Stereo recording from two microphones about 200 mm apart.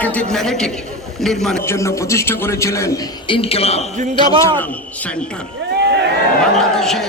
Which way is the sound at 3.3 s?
30° left (ahead or behind).